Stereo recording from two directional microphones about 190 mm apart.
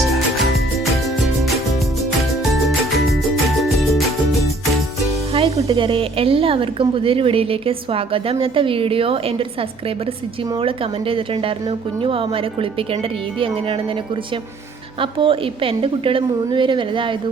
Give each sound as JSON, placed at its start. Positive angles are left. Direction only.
{"t": 2.5, "sound": "music", "side_deg": 0}
{"t": 5.3, "sound": "music", "side_deg": -30}
{"t": 5.6, "sound": "a woman's voice", "side_deg": -25}
{"t": 10.6, "sound": "a woman's voice", "side_deg": -30}
{"t": 15.0, "sound": "a woman's voice", "side_deg": -30}